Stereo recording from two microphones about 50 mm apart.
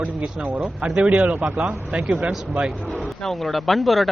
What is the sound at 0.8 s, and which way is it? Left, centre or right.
A man's voice, centre.